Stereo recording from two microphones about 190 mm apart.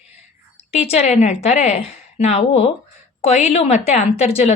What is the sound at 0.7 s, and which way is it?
A woman's voice, 35° left (ahead or behind).